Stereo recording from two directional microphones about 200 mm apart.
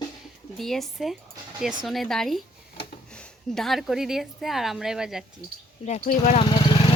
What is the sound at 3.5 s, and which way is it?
A woman's voice, centre (ahead or behind).